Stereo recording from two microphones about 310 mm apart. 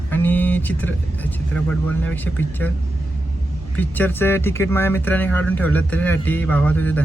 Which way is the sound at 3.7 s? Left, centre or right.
Centre.